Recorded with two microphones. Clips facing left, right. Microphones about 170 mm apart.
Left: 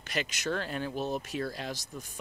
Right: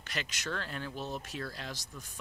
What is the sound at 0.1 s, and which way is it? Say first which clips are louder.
Speech: left 6 dB; 15° left (ahead or behind).